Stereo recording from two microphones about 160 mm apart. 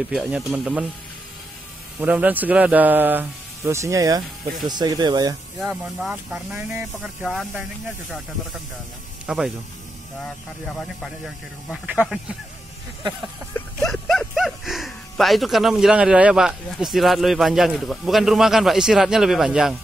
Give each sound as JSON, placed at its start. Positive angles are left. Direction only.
{"t": 0.1, "sound": "speech", "side_deg": -5}
{"t": 2.0, "sound": "speech", "side_deg": -10}
{"t": 5.6, "sound": "speech", "side_deg": -5}
{"t": 9.2, "sound": "speech", "side_deg": -5}
{"t": 13.8, "sound": "speech", "side_deg": 0}